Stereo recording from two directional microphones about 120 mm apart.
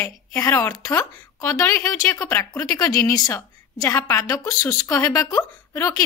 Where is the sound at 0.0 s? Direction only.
25° left (ahead or behind).